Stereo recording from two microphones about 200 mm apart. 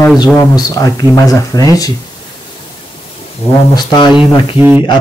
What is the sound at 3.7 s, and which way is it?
Speech, 20° left (ahead or behind).